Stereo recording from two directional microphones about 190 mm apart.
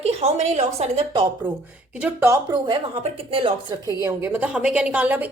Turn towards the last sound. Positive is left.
turn(degrees=-10)  # may be behind; listen again after turning